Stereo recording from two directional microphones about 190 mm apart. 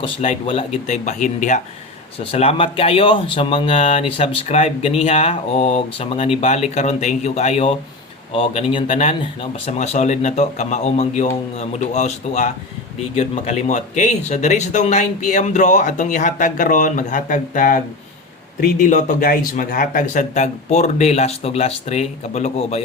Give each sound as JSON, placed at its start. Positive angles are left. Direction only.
{"t": 0.0, "sound": "speech", "side_deg": 30}